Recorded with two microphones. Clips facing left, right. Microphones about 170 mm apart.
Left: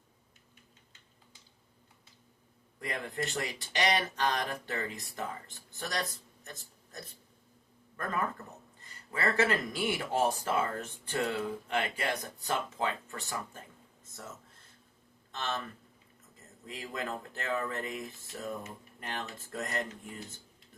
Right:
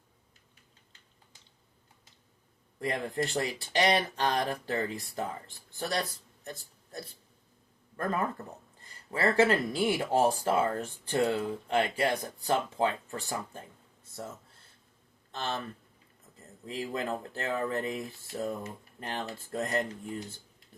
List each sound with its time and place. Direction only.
2.8 s speech: 30° right (ahead or behind)
8.8 s speech: 30° right (ahead or behind)
15.3 s speech: 30° right (ahead or behind)
16.6 s speech: 30° right (ahead or behind)